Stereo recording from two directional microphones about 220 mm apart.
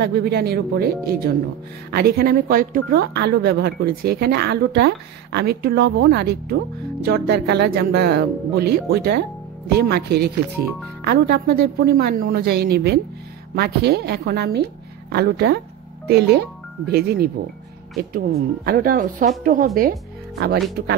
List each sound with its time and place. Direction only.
0.0 s speech: 45° right (ahead or behind)